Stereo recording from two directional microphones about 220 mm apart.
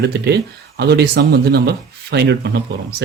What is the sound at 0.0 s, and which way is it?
Speech, 50° right (ahead or behind).